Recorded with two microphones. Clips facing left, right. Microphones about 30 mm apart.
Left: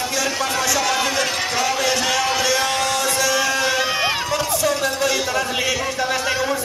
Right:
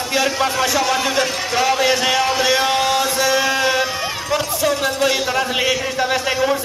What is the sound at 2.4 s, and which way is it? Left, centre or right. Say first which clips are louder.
Music: right 3 dB; centre.